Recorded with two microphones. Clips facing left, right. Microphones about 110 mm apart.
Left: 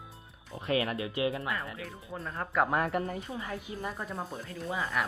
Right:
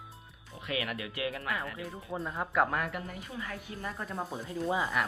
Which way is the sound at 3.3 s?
25° left (ahead or behind).